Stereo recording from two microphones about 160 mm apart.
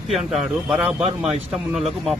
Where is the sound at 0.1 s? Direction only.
Centre (ahead or behind).